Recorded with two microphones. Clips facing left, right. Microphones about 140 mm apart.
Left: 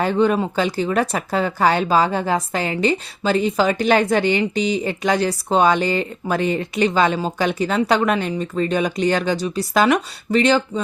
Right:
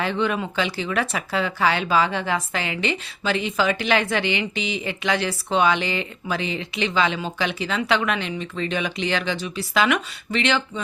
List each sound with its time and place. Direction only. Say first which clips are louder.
0.0 s speech: left 6 dB; 40° left (ahead or behind)